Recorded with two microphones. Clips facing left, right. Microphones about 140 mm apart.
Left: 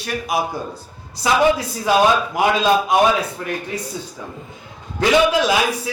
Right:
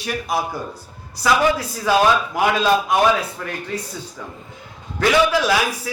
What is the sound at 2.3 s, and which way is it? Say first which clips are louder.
A man's voice: left 1 dB; 15° left (ahead or behind).